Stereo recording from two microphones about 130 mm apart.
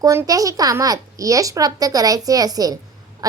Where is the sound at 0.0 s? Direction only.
25° right (ahead or behind).